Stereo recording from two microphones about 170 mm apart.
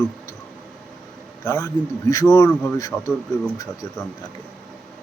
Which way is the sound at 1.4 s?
20° left (ahead or behind).